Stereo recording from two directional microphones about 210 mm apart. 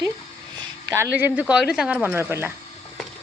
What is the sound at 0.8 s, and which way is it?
Speech, 15° right (ahead or behind).